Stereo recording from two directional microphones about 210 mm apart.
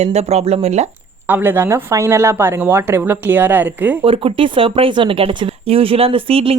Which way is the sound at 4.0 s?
25° right (ahead or behind).